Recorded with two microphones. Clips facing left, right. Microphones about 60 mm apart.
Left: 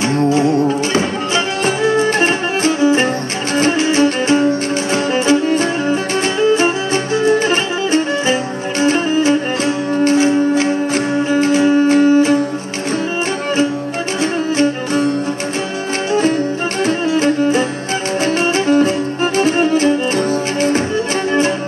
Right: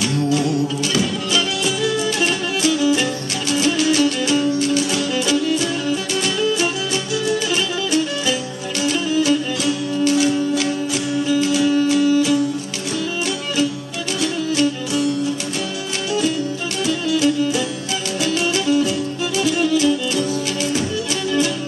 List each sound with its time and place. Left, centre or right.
0.0 s music: left
14.2 s music: left